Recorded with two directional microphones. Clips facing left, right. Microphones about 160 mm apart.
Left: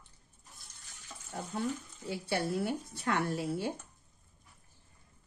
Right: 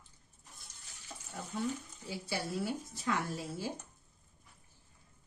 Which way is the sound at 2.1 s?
60° left (ahead or behind).